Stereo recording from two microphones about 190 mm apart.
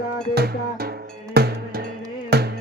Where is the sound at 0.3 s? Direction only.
55° right (ahead or behind).